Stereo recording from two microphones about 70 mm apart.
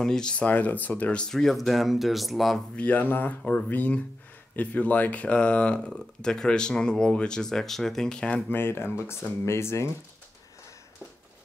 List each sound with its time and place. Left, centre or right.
0.0 s speech: centre
0.5 s speech: left
1.2 s speech: centre
2.7 s speech: left
5.9 s speech: centre
8.5 s speech: left